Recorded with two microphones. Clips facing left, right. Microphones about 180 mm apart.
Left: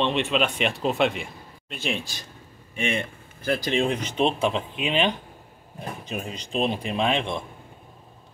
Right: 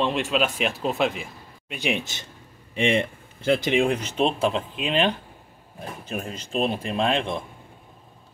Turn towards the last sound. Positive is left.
turn(degrees=0)  # may be behind; listen again after turning